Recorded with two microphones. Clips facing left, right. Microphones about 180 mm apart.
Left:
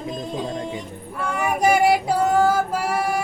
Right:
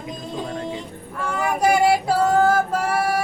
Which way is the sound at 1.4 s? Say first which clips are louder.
Even; 15° left (ahead or behind).